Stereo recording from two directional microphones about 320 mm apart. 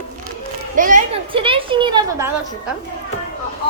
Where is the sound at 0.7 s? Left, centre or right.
Right.